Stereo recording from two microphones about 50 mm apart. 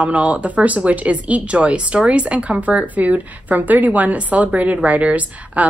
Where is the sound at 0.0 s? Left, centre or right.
Right.